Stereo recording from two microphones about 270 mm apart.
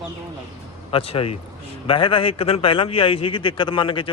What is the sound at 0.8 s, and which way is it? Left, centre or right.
A man's voice, left.